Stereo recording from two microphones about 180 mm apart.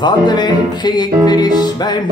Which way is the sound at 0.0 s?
25° left (ahead or behind).